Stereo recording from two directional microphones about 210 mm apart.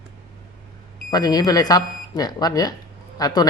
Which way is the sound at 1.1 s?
15° left (ahead or behind).